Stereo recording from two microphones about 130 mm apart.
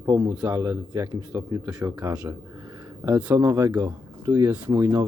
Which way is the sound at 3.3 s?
25° right (ahead or behind).